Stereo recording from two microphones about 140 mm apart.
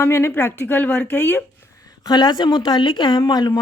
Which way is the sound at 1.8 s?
30° left (ahead or behind).